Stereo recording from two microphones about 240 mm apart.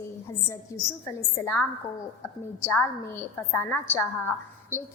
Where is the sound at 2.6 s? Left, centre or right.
Centre.